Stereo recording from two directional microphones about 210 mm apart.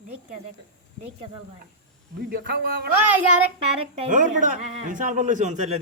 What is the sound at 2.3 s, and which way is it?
Speech, 45° right (ahead or behind).